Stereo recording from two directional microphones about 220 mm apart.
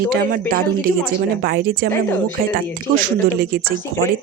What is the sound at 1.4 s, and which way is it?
Speech, 45° right (ahead or behind).